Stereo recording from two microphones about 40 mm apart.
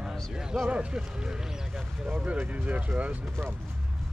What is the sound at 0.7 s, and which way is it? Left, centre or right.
Speech, right.